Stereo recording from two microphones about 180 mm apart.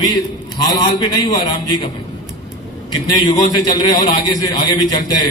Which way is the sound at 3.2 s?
25° left (ahead or behind).